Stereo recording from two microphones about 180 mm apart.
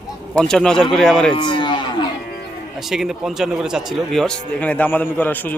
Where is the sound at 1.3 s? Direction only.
25° left (ahead or behind).